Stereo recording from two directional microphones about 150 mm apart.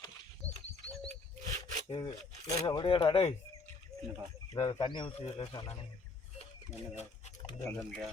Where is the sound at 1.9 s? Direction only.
30° left (ahead or behind).